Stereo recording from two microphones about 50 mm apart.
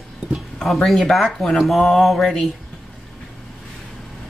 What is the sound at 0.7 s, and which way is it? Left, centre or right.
Speech, centre.